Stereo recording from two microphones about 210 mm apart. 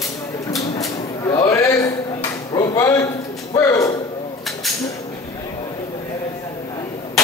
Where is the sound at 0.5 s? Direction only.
15° left (ahead or behind).